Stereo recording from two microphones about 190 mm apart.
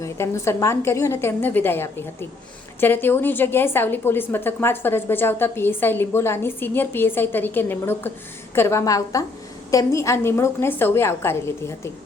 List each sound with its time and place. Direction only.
0.0 s a woman's voice: 15° left (ahead or behind)